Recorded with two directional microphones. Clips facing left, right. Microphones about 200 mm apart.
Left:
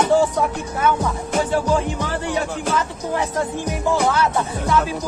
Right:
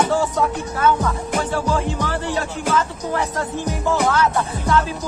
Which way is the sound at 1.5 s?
15° left (ahead or behind).